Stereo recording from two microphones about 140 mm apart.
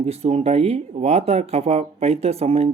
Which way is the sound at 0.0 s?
45° right (ahead or behind).